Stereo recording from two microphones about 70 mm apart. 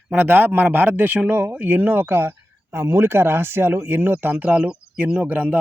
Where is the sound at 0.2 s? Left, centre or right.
Right.